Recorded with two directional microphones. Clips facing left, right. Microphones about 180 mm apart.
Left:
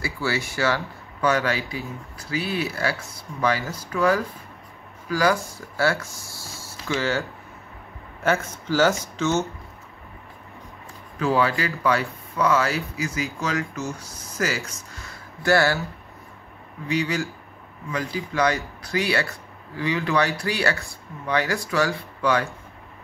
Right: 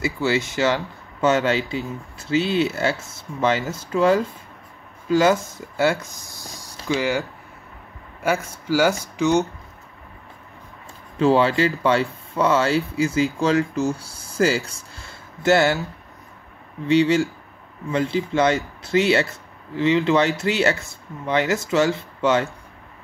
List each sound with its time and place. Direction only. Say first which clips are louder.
0.0 s speech: right 5 dB; 20° right (ahead or behind)
11.1 s speech: right 5 dB; 25° right (ahead or behind)
16.8 s speech: right 8 dB; 25° right (ahead or behind)